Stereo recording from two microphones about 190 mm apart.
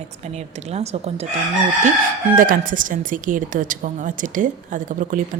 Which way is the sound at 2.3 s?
45° right (ahead or behind).